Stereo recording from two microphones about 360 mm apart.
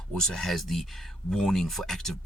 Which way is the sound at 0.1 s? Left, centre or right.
Centre.